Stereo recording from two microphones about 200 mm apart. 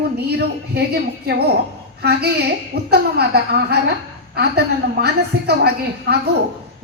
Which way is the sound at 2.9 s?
55° right (ahead or behind).